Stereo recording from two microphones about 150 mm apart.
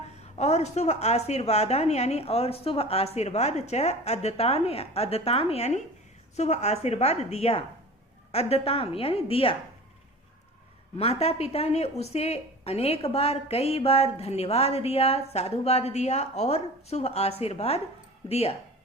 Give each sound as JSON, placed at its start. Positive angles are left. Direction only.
{"t": 0.2, "sound": "a sound", "side_deg": 45}
{"t": 0.8, "sound": "a woman's voice", "side_deg": 45}
{"t": 10.9, "sound": "a woman's voice", "side_deg": 45}